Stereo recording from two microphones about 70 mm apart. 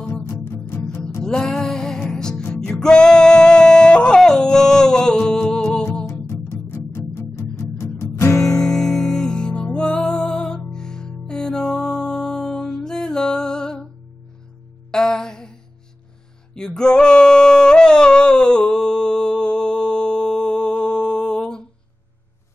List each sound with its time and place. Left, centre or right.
0.2 s music: left
1.2 s music: centre
2.5 s singing: centre
6.0 s music: left
8.5 s music: centre
14.9 s music: centre
16.5 s singing: centre